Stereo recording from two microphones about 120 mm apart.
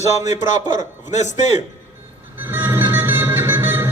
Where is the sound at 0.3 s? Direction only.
90° left.